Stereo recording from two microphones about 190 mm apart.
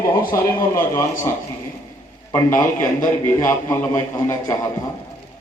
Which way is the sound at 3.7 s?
10° left (ahead or behind).